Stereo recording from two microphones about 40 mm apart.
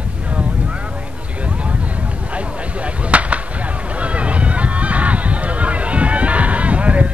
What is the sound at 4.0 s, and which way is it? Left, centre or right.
Honk, right.